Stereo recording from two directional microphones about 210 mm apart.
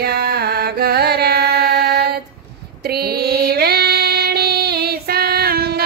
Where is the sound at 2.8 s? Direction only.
50° right (ahead or behind).